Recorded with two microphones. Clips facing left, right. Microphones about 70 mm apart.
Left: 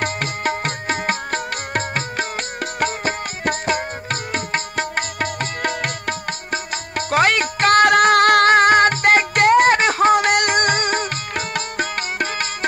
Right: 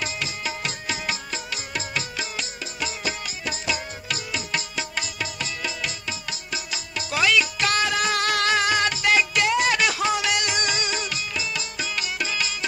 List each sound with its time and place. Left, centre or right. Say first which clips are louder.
0.0 s music: left 8 dB; left